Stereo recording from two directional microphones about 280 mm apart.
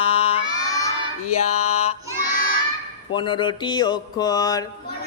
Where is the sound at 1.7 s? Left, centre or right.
Left.